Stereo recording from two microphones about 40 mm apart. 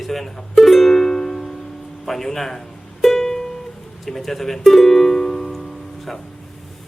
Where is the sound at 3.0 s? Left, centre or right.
Centre.